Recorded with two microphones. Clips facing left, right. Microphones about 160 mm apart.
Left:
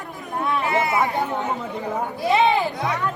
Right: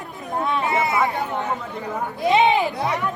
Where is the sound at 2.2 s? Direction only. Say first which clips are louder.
Right 2 dB; 20° right (ahead or behind).